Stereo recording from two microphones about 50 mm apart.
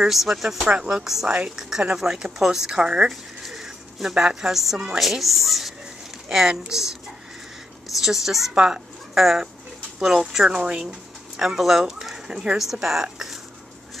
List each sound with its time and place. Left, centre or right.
0.0 s speech: centre
0.7 s speech: centre
3.1 s a woman's voice: centre
8.0 s speech: centre
8.5 s speech: centre
9.1 s speech: centre
10.5 s speech: right
10.9 s speech: centre